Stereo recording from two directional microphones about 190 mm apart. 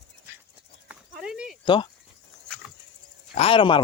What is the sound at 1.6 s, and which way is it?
Speech, 25° left (ahead or behind).